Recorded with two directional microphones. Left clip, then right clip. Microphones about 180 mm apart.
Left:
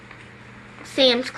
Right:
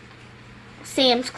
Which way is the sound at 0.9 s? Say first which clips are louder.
Left 1 dB; 60° right (ahead or behind).